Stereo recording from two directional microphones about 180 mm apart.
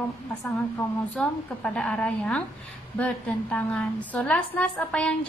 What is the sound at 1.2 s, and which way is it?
A woman's voice, 5° left (ahead or behind).